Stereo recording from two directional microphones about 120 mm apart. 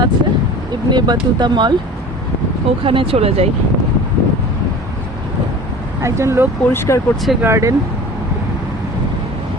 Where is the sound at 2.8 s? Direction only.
50° right (ahead or behind).